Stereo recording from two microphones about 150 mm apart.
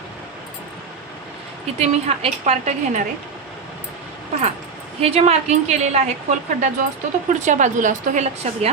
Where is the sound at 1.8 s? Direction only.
50° right (ahead or behind).